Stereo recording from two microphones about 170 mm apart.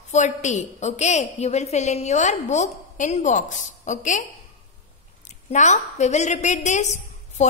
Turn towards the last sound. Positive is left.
turn(degrees=45)  # may be behind; listen again after turning